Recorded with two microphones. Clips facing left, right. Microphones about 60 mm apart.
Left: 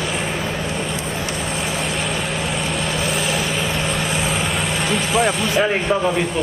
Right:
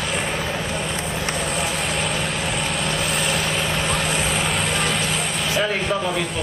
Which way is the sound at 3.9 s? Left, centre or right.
Centre.